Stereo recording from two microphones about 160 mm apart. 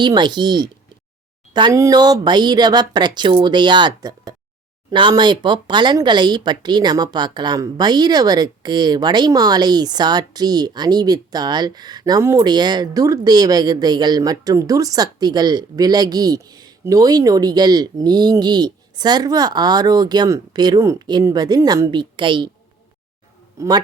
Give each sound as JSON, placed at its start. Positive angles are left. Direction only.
{"t": 0.0, "sound": "speech", "side_deg": -30}
{"t": 23.6, "sound": "speech", "side_deg": -25}